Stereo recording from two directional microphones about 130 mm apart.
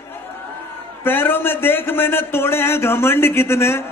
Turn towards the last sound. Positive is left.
turn(degrees=20)  # may be behind; listen again after turning